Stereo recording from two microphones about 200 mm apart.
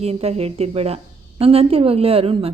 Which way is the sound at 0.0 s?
30° right (ahead or behind).